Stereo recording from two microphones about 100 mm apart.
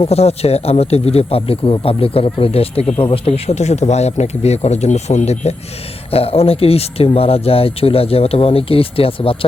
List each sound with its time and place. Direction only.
0.0 s speech: 90° left
6.1 s speech: 75° left (ahead or behind)